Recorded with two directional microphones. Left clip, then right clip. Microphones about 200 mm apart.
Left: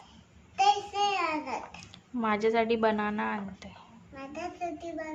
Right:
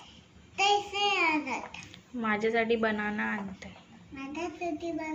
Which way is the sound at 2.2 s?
25° left (ahead or behind).